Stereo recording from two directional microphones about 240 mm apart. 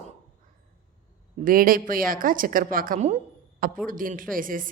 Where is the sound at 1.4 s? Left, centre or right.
Right.